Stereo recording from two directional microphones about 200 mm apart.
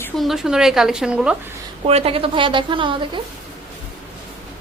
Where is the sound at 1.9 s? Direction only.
30° right (ahead or behind).